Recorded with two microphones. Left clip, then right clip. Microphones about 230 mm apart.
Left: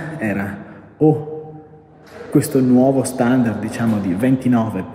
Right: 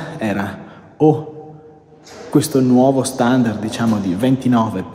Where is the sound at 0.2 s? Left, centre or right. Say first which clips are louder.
Right 2 dB; centre.